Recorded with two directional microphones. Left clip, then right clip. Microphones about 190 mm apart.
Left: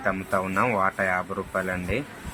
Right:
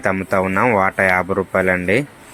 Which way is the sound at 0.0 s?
25° right (ahead or behind).